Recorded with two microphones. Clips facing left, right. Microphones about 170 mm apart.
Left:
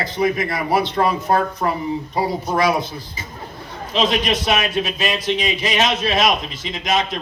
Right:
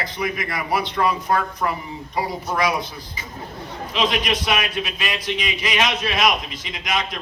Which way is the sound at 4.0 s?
25° left (ahead or behind).